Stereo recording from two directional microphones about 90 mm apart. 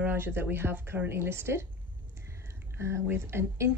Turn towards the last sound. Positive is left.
turn(degrees=-30)  # may be behind; listen again after turning